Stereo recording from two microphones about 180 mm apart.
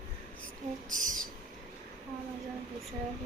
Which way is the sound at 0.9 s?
45° right (ahead or behind).